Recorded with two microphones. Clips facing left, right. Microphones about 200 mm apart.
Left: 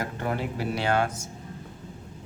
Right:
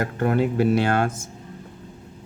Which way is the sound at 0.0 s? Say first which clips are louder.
Right 8 dB; 60° right (ahead or behind).